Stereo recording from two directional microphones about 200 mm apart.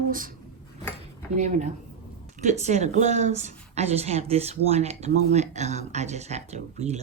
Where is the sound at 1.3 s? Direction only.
35° right (ahead or behind).